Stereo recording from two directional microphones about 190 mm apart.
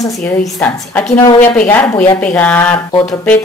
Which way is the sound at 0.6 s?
10° left (ahead or behind).